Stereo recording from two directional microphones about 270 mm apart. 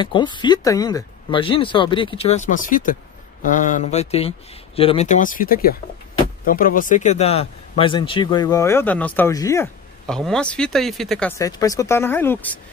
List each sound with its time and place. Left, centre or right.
0.0 s speech: centre